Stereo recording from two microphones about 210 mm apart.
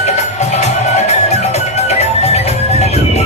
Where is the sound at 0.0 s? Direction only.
30° left (ahead or behind).